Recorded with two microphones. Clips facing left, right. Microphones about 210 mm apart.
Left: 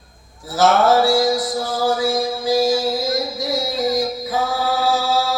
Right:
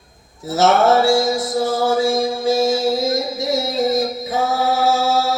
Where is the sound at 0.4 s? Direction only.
25° right (ahead or behind).